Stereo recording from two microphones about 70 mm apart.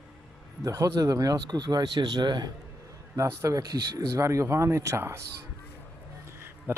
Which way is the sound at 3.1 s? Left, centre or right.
Right.